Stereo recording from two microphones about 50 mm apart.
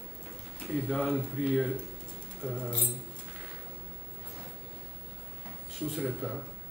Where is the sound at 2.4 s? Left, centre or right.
Centre.